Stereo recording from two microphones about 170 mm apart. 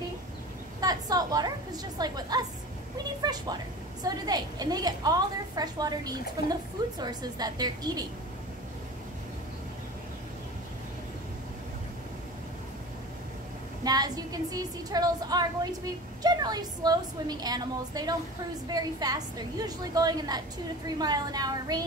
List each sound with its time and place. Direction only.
0.7 s a woman's voice: 20° right (ahead or behind)
13.8 s a woman's voice: 25° right (ahead or behind)